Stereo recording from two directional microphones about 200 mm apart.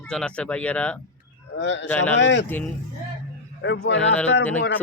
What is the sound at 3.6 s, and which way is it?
Speech, 60° left (ahead or behind).